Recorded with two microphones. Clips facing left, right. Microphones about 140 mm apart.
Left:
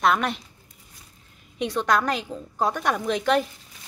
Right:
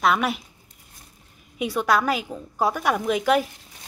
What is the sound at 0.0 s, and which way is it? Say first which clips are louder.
Speech: right 1 dB; 5° right (ahead or behind).